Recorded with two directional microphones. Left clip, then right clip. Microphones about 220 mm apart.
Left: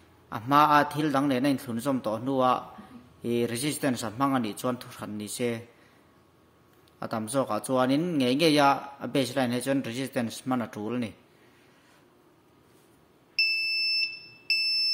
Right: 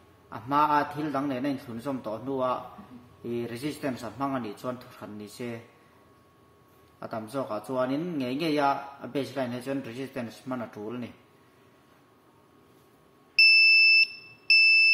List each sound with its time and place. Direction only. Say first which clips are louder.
0.3 s speech: left 3 dB; 40° left (ahead or behind)
7.0 s speech: left 4 dB; 40° left (ahead or behind)
13.4 s smoke detector: right 9 dB; 5° right (ahead or behind)